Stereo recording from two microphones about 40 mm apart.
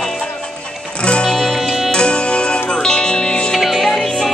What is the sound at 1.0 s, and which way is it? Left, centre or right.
Music, left.